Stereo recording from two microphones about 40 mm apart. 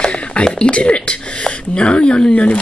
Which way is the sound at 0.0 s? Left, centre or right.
Left.